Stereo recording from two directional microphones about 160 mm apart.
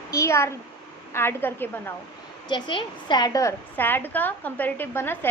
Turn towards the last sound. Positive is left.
turn(degrees=15)  # may be behind; listen again after turning